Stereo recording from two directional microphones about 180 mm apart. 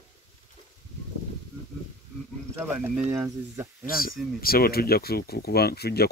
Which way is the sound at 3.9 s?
55° left (ahead or behind).